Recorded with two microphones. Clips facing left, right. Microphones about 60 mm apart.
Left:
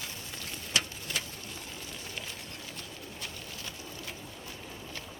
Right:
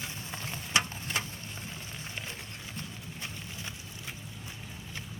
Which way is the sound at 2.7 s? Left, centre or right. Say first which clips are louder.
Right 1 dB; right.